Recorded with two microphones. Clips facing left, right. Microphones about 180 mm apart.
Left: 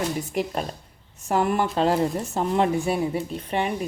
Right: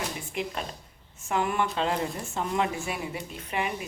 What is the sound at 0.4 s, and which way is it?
Speech, 40° left (ahead or behind).